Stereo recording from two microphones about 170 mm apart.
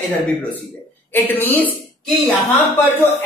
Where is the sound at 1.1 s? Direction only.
10° left (ahead or behind).